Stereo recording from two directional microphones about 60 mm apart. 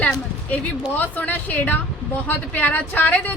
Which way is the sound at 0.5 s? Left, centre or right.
Left.